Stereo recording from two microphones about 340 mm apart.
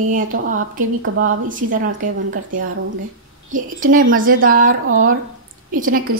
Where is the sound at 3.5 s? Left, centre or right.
Right.